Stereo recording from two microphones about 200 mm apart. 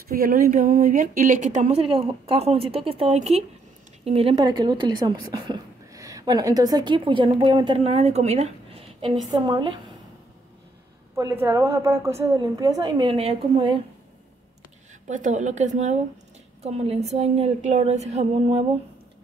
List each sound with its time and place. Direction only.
0.1 s a woman's voice: 45° right (ahead or behind); by 9.8 s 25° right (ahead or behind)
11.1 s a woman's voice: 15° right (ahead or behind)
15.0 s a woman's voice: 40° right (ahead or behind)